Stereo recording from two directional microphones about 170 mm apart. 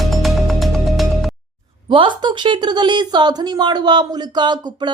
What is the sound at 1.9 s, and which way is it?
A woman's voice, 30° right (ahead or behind).